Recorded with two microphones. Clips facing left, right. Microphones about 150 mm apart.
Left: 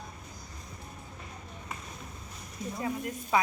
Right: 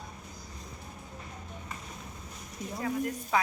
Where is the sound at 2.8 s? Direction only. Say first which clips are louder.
Right 4 dB; 15° left (ahead or behind).